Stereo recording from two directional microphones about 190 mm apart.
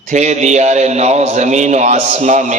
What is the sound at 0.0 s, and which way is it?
A man's voice, 35° right (ahead or behind).